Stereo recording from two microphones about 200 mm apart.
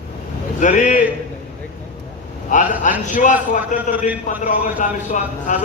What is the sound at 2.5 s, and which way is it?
A man's voice, 40° left (ahead or behind).